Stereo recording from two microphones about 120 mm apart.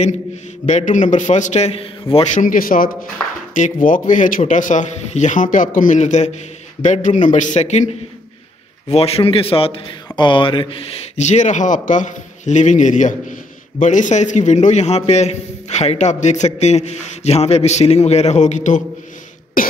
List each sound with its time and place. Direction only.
0.7 s a man's voice: 80° left; by 2.2 s 50° left (ahead or behind)
2.7 s speech: 90° left; by 7.9 s 70° left (ahead or behind)
8.9 s speech: 55° left (ahead or behind)
11.1 s a man's voice: 75° left (ahead or behind)